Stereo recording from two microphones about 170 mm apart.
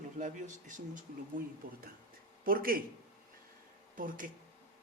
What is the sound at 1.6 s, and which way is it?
Speech, 60° right (ahead or behind).